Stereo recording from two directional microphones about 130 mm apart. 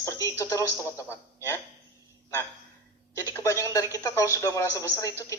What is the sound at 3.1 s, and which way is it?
A man's voice, 25° left (ahead or behind).